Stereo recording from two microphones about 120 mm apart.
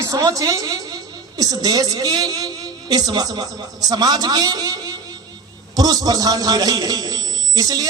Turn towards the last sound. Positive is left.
turn(degrees=-30)  # may be behind; listen again after turning